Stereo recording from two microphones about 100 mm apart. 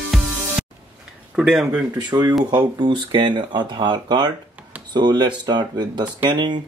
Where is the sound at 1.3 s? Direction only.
5° right (ahead or behind).